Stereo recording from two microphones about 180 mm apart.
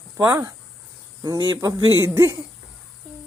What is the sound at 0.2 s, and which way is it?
Speech, 15° right (ahead or behind).